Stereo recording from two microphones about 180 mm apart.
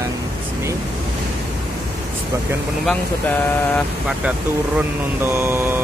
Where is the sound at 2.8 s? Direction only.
10° left (ahead or behind).